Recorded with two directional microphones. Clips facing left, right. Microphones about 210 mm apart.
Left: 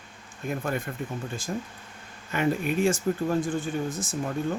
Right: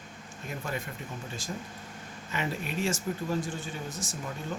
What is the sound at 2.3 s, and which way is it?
Speech, 50° left (ahead or behind).